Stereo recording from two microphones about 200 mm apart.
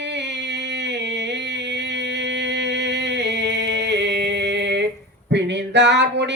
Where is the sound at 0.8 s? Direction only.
60° right (ahead or behind).